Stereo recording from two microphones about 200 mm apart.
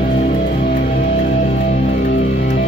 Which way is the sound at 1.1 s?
35° left (ahead or behind).